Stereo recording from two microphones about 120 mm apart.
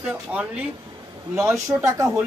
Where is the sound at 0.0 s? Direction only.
10° right (ahead or behind).